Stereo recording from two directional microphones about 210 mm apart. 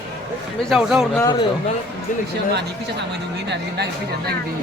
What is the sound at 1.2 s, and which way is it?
Speech, 20° left (ahead or behind).